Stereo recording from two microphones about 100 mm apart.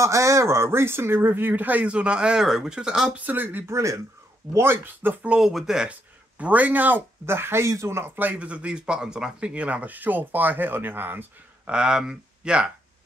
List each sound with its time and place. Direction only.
0.0 s speech: 30° right (ahead or behind); by 3.3 s 10° right (ahead or behind)
3.3 s speech: 20° right (ahead or behind)